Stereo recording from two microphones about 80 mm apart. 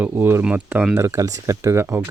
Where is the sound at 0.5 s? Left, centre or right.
Centre.